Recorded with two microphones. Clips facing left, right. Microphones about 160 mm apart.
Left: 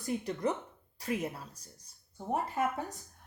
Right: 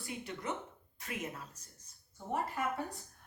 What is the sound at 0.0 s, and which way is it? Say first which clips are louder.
Speech: left 9 dB; 40° left (ahead or behind).